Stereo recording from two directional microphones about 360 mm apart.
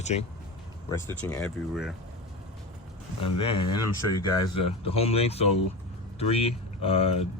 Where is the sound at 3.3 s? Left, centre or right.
Left.